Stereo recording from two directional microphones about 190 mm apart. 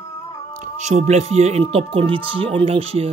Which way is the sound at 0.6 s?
35° right (ahead or behind).